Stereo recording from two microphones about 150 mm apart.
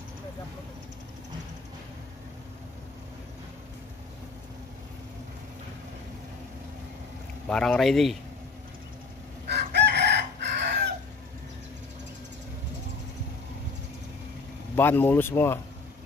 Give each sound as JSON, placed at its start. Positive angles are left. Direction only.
{"t": 7.4, "sound": "speech", "side_deg": 5}
{"t": 9.5, "sound": "chicken", "side_deg": -90}
{"t": 14.8, "sound": "speech", "side_deg": 15}